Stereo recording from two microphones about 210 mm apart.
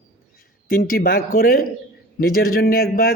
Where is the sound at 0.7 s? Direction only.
45° left (ahead or behind).